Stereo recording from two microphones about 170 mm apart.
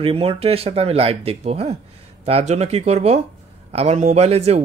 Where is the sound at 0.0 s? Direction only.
35° right (ahead or behind).